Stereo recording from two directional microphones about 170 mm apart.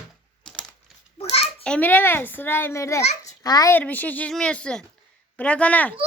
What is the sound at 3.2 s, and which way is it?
Babbling, 20° left (ahead or behind).